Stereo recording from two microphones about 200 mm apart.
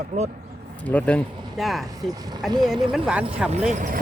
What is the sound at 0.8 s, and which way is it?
Speech, 5° left (ahead or behind).